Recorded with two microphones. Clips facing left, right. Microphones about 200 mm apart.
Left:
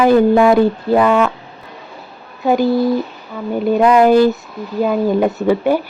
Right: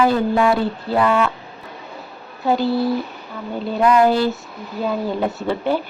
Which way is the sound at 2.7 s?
45° left (ahead or behind).